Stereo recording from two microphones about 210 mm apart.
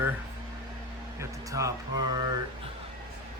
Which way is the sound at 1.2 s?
15° right (ahead or behind).